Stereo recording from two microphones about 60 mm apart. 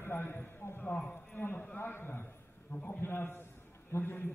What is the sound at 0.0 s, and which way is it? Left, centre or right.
A man's voice, left.